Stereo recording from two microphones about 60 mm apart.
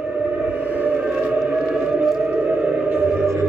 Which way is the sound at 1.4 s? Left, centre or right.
Centre.